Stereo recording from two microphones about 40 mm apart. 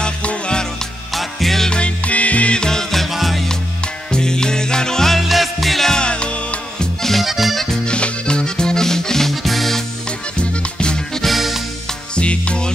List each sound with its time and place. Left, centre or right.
0.0 s music: left
1.1 s music: centre
1.7 s music: left
2.5 s music: centre
3.1 s music: centre
4.1 s music: centre
5.1 s music: centre
5.9 s music: left
7.0 s music: centre
7.8 s music: left
9.3 s music: centre
10.3 s music: left
11.2 s music: centre
12.2 s music: left